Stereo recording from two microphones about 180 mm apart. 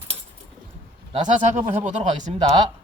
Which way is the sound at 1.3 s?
45° right (ahead or behind).